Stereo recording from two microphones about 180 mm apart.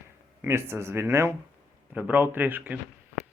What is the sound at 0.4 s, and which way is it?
Speech, 15° right (ahead or behind).